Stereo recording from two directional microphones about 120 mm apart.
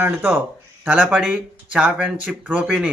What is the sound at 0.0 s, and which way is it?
A man's voice, 20° right (ahead or behind).